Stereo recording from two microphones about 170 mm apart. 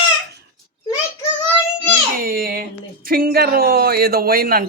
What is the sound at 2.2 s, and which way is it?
A man's voice, 60° right (ahead or behind).